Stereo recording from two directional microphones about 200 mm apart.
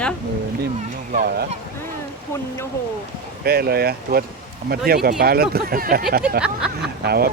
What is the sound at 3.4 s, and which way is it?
Speech, 50° right (ahead or behind).